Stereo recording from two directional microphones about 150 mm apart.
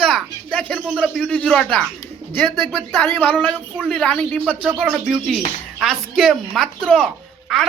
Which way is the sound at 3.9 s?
5° left (ahead or behind).